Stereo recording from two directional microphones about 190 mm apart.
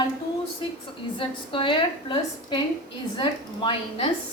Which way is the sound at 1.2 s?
25° left (ahead or behind).